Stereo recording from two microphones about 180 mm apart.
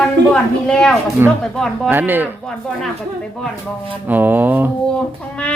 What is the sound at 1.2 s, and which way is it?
Speech, 10° right (ahead or behind).